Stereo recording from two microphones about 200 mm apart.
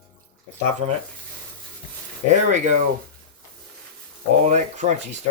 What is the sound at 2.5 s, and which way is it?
Speech, 40° right (ahead or behind).